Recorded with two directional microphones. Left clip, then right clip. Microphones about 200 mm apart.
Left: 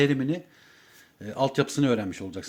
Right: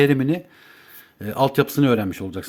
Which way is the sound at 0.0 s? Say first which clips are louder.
Right 6 dB; 25° right (ahead or behind).